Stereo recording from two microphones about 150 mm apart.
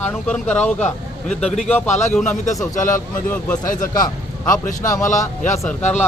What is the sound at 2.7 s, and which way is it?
Speech, 60° left (ahead or behind).